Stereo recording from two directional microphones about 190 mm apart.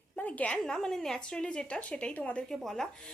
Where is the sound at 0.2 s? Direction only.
10° left (ahead or behind).